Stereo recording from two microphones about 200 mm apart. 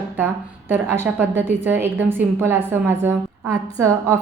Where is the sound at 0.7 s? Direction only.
10° right (ahead or behind).